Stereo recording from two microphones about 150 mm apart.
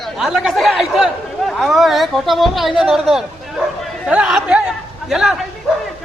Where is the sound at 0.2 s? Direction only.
Centre (ahead or behind).